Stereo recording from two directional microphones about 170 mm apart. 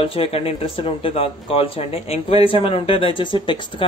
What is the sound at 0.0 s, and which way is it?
Speech, 35° left (ahead or behind).